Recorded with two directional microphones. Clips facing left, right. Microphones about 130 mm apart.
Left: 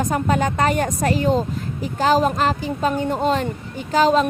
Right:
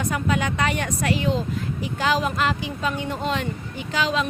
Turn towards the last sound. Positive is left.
turn(degrees=45)  # may be behind; listen again after turning